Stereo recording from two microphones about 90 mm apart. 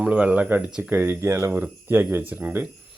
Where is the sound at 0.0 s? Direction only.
15° right (ahead or behind).